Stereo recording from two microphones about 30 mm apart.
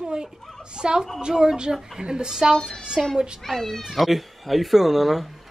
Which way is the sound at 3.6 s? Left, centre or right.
Centre.